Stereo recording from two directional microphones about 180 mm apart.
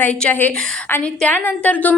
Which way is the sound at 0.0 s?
10° left (ahead or behind).